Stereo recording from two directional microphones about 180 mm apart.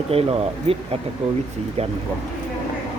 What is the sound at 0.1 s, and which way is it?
Speech, 35° right (ahead or behind).